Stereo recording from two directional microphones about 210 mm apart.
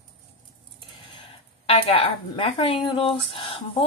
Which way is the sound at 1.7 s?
25° left (ahead or behind).